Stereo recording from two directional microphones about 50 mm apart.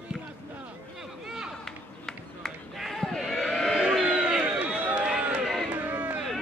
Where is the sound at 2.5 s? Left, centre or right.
Centre.